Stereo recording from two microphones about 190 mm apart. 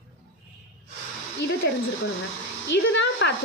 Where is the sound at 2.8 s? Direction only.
70° left (ahead or behind).